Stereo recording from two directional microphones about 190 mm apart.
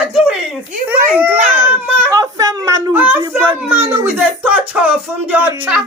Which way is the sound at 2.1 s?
20° right (ahead or behind).